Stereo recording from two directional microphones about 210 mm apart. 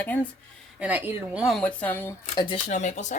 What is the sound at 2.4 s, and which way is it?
Speech, 25° left (ahead or behind).